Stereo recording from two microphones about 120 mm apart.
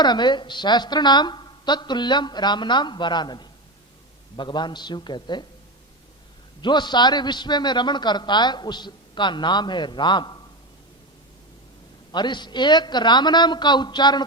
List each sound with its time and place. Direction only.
0.0 s a man's voice: 40° left (ahead or behind)
6.6 s a man's voice: 40° left (ahead or behind)
12.1 s a man's voice: 40° left (ahead or behind)